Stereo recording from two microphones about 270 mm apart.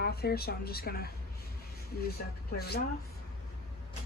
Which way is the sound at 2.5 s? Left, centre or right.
Left.